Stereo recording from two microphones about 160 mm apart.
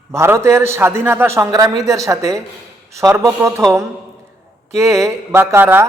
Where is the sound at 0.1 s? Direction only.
15° right (ahead or behind).